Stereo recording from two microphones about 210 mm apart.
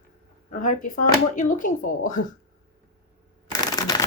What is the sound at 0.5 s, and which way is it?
Speech, 40° left (ahead or behind).